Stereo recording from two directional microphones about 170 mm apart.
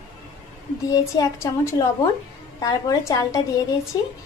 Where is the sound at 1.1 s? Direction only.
20° left (ahead or behind).